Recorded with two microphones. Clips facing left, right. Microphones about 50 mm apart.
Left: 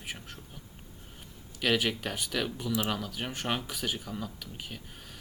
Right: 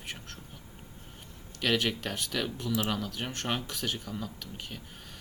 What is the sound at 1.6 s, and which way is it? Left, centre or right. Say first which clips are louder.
Speech: left 1 dB; centre.